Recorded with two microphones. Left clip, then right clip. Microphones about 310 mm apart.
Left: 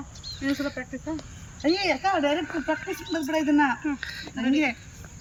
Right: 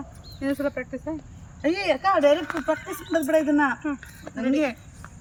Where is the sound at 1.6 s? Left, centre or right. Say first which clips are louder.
Right 1 dB; centre.